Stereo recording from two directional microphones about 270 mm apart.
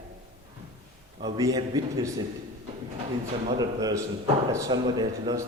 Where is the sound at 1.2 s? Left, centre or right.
Centre.